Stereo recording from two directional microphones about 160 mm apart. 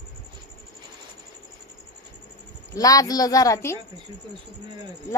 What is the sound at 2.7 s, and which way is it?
A woman's voice, 20° left (ahead or behind).